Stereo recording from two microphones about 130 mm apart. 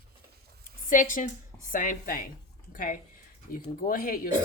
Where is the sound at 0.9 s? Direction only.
85° left.